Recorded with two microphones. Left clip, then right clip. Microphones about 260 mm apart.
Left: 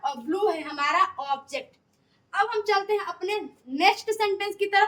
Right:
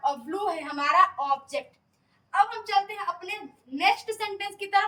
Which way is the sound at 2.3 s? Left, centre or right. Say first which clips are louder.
Even; centre.